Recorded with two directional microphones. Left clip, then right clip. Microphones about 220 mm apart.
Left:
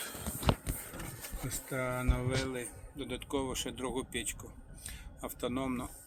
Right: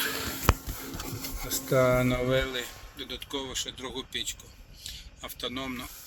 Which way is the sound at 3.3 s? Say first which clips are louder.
Right 2 dB; 5° right (ahead or behind).